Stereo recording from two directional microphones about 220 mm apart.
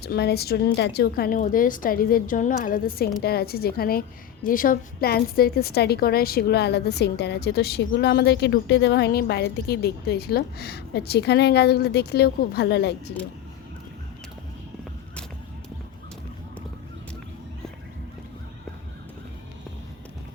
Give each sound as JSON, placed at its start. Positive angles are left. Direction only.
{"t": 0.0, "sound": "a woman's voice", "side_deg": 45}